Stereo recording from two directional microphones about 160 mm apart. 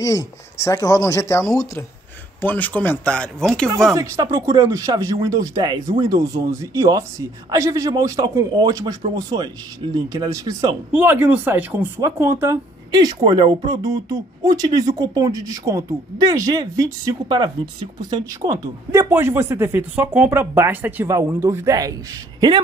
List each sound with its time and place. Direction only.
0.6 s speech: 20° left (ahead or behind)
3.9 s speech: 20° right (ahead or behind)
10.9 s speech: 10° right (ahead or behind)